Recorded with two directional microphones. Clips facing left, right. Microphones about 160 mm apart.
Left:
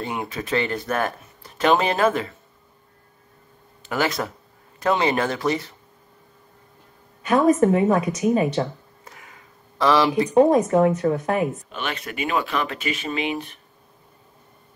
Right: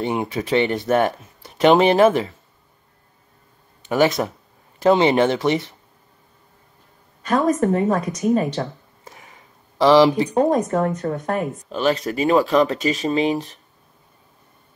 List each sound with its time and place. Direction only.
0.0 s speech: 25° right (ahead or behind)
3.9 s speech: 20° right (ahead or behind)
7.2 s a woman's voice: 10° left (ahead or behind)
9.0 s a sound: 25° right (ahead or behind)
10.3 s a woman's voice: centre (ahead or behind)
11.7 s speech: 35° right (ahead or behind)